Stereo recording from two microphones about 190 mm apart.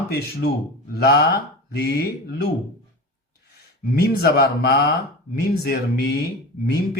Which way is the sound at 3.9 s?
55° left (ahead or behind).